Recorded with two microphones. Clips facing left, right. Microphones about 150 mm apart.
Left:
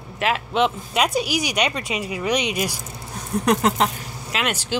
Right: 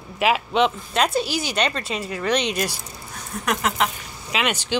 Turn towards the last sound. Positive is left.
turn(degrees=5)  # may be behind; listen again after turning